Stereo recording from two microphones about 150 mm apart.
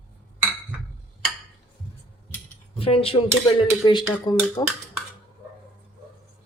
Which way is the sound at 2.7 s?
40° left (ahead or behind).